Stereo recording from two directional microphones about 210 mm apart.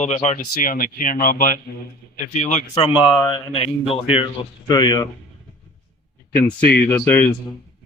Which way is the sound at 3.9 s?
25° left (ahead or behind).